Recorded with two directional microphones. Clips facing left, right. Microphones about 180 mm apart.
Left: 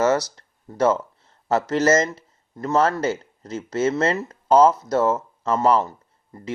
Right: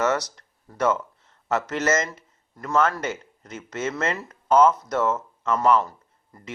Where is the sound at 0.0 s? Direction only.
30° left (ahead or behind).